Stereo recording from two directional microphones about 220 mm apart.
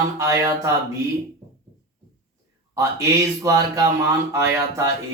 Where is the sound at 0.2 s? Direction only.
15° right (ahead or behind).